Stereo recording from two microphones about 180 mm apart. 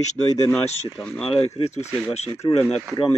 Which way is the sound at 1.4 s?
35° left (ahead or behind).